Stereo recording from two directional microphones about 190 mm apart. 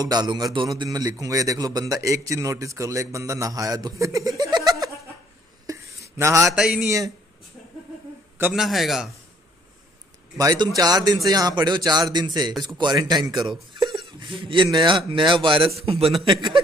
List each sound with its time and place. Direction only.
0.0 s a sound: 20° right (ahead or behind)
6.5 s a man's voice: centre (ahead or behind)
8.4 s a man's voice: 5° right (ahead or behind)
10.3 s speech: 20° right (ahead or behind)